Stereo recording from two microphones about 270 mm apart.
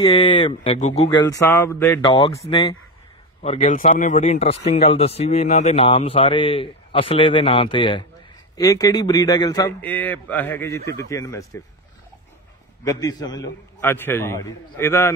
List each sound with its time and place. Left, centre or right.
0.0 s speech: centre
12.8 s speech: centre